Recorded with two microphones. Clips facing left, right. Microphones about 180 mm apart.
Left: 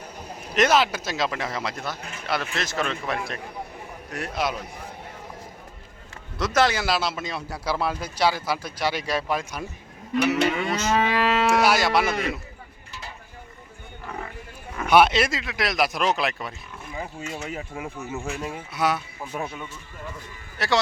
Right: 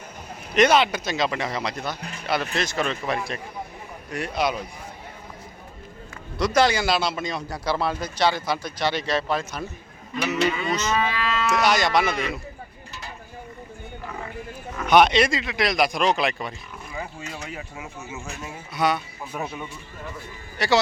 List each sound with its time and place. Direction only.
0.5 s speech: centre (ahead or behind)
6.4 s speech: centre (ahead or behind)
10.3 s speech: 60° left (ahead or behind)
10.7 s speech: 10° left (ahead or behind)
10.9 s livestock: 70° left (ahead or behind)
11.4 s speech: 10° left (ahead or behind)
14.8 s speech: 5° left (ahead or behind)
17.5 s speech: 55° left (ahead or behind)
18.7 s speech: 5° left (ahead or behind)
20.6 s speech: 5° right (ahead or behind)